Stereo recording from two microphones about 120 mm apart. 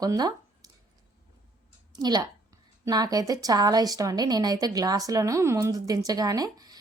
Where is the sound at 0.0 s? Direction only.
30° right (ahead or behind).